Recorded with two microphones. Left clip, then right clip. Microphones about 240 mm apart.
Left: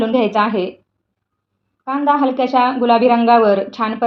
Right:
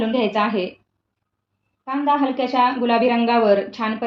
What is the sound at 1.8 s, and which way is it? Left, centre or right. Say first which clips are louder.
A woman's voice: left 4 dB; left.